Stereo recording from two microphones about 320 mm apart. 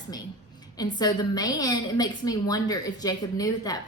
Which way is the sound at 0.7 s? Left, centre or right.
Centre.